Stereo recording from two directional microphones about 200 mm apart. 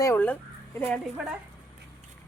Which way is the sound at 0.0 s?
10° left (ahead or behind).